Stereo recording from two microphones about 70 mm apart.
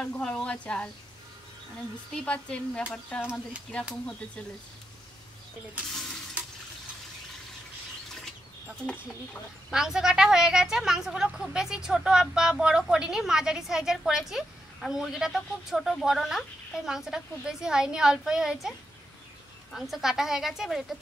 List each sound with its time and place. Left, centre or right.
0.0 s speech: centre
2.1 s speech: centre
9.7 s a woman's voice: centre